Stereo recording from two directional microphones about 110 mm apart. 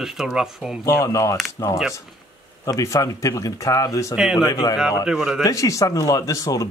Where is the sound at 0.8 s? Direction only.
30° left (ahead or behind).